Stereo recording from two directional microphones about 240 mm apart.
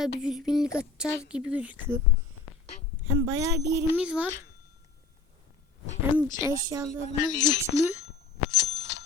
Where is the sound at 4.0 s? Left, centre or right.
Centre.